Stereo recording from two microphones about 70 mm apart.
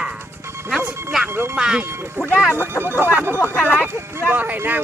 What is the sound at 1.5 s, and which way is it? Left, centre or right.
Speech, centre.